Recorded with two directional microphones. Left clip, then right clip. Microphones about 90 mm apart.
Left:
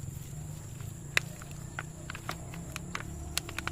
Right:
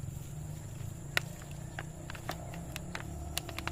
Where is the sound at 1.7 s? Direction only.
15° left (ahead or behind).